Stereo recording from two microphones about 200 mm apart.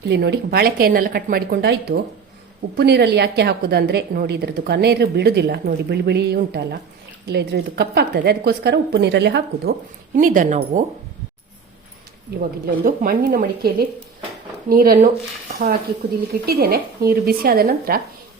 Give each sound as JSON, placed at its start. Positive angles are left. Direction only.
{"t": 0.1, "sound": "a woman's voice", "side_deg": -55}
{"t": 10.2, "sound": "a woman's voice", "side_deg": -45}
{"t": 12.3, "sound": "a woman's voice", "side_deg": -45}
{"t": 16.5, "sound": "a woman's voice", "side_deg": -50}